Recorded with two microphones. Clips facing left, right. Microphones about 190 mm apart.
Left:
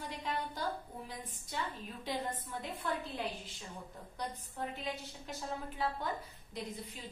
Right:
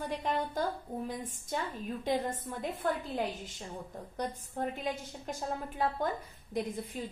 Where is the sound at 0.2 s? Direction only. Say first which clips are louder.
Right 4 dB; 45° right (ahead or behind).